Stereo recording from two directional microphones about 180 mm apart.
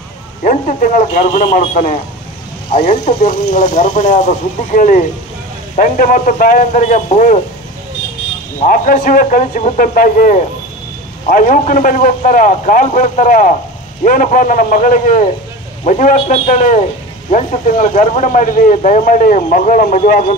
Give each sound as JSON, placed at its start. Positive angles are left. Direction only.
{"t": 0.4, "sound": "speech", "side_deg": 45}
{"t": 8.5, "sound": "a man's voice", "side_deg": 50}